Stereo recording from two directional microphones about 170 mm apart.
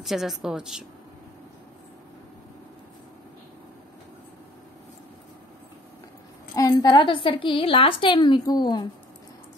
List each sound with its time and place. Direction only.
0.0 s a woman's voice: centre (ahead or behind)
6.5 s a woman's voice: 20° left (ahead or behind)